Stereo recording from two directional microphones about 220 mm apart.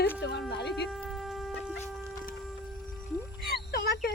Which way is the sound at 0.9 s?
Centre (ahead or behind).